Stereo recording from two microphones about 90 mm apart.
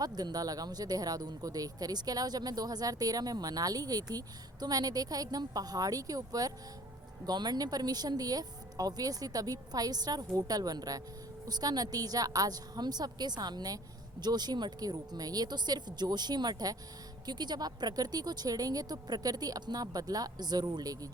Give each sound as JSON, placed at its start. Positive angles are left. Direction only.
{"t": 0.0, "sound": "speech", "side_deg": -50}